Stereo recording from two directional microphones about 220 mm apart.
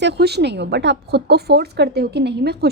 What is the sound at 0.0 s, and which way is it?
Speech, 50° right (ahead or behind).